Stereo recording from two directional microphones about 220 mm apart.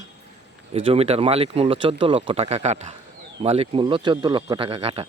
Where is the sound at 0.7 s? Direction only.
25° right (ahead or behind).